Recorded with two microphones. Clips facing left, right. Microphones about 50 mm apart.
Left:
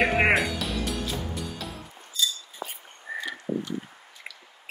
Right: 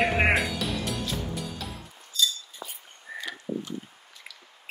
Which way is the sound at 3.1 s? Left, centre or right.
Left.